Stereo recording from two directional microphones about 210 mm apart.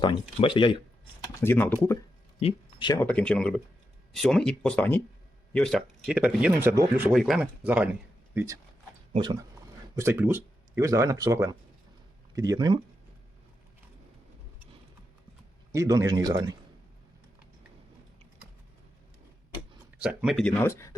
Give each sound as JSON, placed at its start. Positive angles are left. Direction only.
{"t": 0.0, "sound": "speech", "side_deg": 25}
{"t": 1.4, "sound": "speech", "side_deg": 10}
{"t": 2.4, "sound": "speech", "side_deg": 25}
{"t": 3.0, "sound": "speech", "side_deg": 5}
{"t": 9.1, "sound": "speech", "side_deg": -20}
{"t": 15.7, "sound": "speech", "side_deg": -15}
{"t": 20.0, "sound": "speech", "side_deg": -5}
{"t": 20.5, "sound": "speech", "side_deg": 10}